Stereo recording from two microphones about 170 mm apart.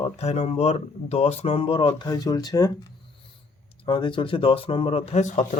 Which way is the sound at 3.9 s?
30° left (ahead or behind).